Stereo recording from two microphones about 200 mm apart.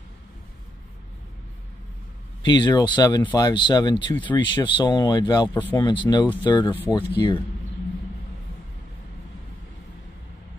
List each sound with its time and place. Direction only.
2.4 s speech: 20° left (ahead or behind)